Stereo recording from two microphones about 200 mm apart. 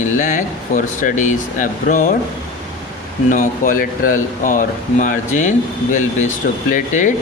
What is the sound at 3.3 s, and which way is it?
Speech, 45° left (ahead or behind).